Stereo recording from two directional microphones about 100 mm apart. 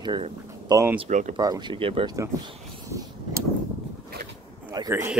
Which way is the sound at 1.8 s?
65° right (ahead or behind).